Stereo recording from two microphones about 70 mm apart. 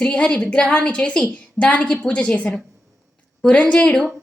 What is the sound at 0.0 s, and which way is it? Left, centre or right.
A woman's voice, centre.